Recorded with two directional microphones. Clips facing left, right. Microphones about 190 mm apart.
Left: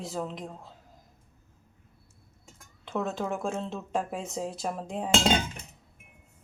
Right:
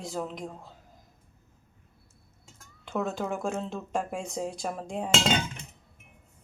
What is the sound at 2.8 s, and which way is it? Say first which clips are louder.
Speech: even; centre (ahead or behind).